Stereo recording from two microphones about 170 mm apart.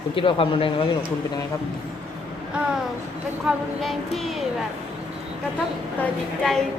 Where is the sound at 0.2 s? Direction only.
30° left (ahead or behind).